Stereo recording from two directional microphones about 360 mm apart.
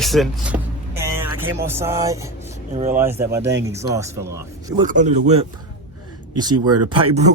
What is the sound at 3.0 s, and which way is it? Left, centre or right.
Speech, centre.